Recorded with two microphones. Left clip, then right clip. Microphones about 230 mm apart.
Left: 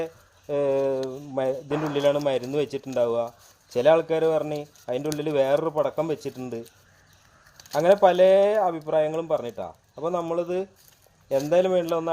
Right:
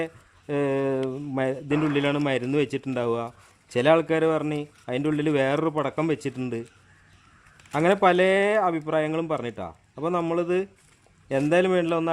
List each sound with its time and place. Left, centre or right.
0.0 s speech: right
7.7 s a man's voice: right